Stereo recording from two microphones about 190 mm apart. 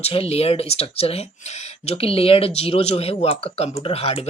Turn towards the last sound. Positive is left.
turn(degrees=30)  # may be behind; listen again after turning